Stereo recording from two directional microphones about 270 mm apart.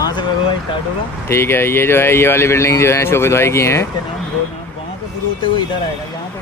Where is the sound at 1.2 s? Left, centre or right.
Centre.